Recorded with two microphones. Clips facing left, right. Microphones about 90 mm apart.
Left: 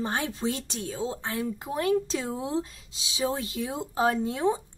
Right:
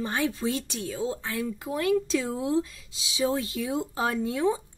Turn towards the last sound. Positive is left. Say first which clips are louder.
# left 1 dB
turn(degrees=30)  # may be behind; listen again after turning